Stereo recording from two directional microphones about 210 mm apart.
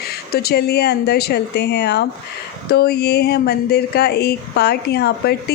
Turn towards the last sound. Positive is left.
turn(degrees=50)  # may be behind; listen again after turning